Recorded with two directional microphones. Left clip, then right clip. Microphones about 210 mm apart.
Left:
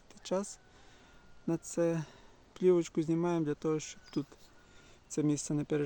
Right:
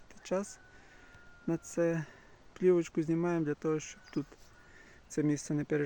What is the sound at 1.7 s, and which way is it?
Speech, centre (ahead or behind).